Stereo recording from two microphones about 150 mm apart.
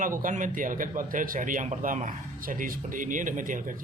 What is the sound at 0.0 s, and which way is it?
Speech, 60° right (ahead or behind).